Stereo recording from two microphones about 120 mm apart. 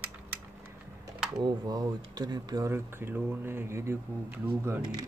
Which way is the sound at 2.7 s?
20° right (ahead or behind).